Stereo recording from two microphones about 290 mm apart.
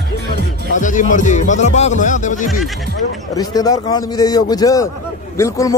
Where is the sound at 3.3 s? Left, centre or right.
Centre.